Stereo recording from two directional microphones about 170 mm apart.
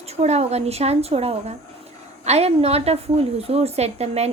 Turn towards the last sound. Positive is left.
turn(degrees=-40)  # may be behind; listen again after turning